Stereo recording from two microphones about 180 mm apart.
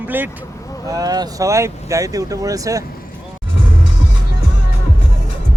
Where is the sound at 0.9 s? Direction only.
20° right (ahead or behind).